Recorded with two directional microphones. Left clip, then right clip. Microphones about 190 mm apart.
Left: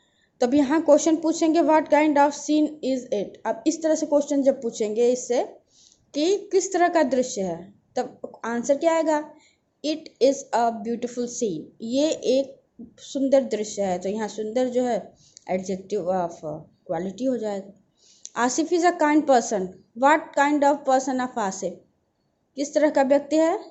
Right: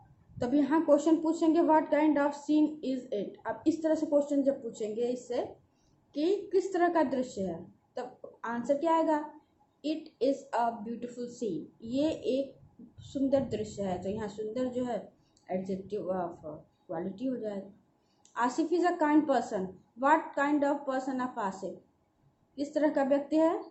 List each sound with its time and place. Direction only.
0.3 s a woman's voice: 35° left (ahead or behind)